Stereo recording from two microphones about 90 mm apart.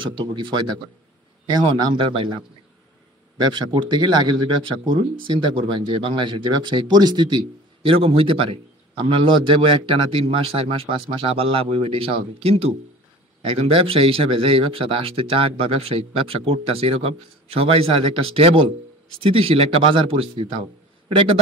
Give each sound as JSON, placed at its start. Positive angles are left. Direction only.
{"t": 0.0, "sound": "a man's voice", "side_deg": -65}
{"t": 1.5, "sound": "a man's voice", "side_deg": -55}